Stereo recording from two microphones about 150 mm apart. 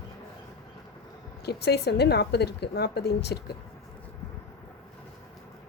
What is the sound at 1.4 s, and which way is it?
A woman's voice, 90° left.